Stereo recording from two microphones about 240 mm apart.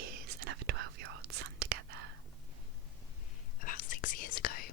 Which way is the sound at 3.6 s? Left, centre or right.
Left.